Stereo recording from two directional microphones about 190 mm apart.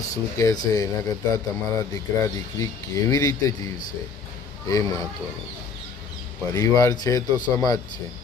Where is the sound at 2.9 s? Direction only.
15° left (ahead or behind).